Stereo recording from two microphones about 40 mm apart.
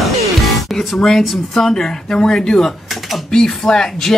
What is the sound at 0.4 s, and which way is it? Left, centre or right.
Music, centre.